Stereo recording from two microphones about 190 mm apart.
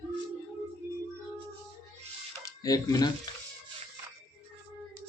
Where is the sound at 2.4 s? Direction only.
20° left (ahead or behind).